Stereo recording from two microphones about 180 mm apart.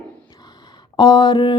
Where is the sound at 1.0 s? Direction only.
25° left (ahead or behind).